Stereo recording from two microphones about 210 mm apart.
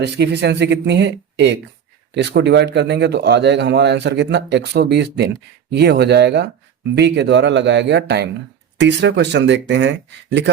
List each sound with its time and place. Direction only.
0.0 s a man's voice: 55° right (ahead or behind)